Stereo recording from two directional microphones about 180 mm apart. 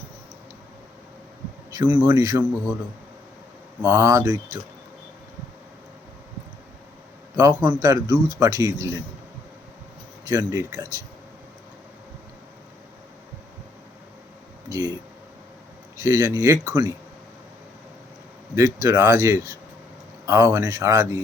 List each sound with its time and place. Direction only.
1.7 s speech: 10° right (ahead or behind)
3.8 s speech: 10° right (ahead or behind)
7.3 s speech: 20° right (ahead or behind)
10.2 s speech: 15° right (ahead or behind)
14.7 s speech: 20° right (ahead or behind)
16.0 s speech: 15° right (ahead or behind)
18.5 s speech: 15° right (ahead or behind)